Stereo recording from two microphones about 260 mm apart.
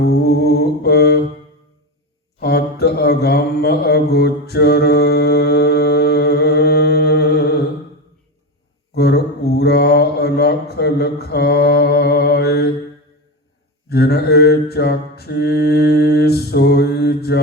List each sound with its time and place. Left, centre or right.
0.0 s humming: left
2.4 s mantra: left
9.0 s mantra: left
13.9 s mantra: left